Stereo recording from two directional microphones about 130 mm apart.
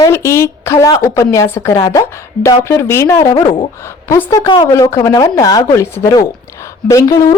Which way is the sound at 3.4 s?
40° left (ahead or behind).